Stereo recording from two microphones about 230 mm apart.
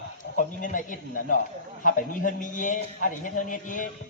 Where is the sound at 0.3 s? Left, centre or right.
Left.